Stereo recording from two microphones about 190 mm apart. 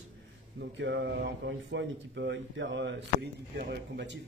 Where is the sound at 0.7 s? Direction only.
65° right (ahead or behind).